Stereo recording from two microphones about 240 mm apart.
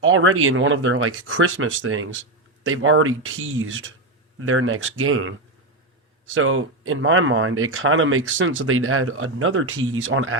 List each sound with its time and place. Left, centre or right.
0.0 s speech: right
6.3 s speech: right